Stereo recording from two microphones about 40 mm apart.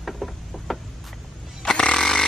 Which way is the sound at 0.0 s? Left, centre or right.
Centre.